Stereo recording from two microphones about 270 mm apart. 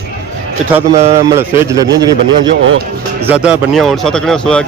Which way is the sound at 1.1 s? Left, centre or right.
Centre.